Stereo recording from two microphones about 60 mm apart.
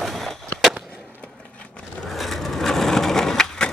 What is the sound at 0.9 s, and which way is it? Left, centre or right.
Skateboard, centre.